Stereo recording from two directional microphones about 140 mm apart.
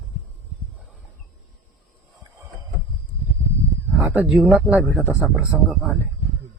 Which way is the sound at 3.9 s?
10° right (ahead or behind).